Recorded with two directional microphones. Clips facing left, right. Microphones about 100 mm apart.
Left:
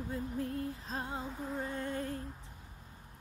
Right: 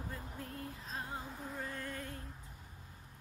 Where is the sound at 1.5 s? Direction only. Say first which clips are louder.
Left 6 dB; 30° left (ahead or behind).